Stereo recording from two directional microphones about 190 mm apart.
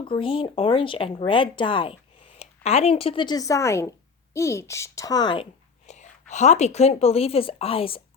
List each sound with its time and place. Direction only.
0.0 s a child's voice: 25° left (ahead or behind)
5.8 s a woman's voice: 40° left (ahead or behind)